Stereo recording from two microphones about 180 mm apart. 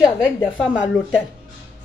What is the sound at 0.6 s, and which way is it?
Speech, 5° right (ahead or behind).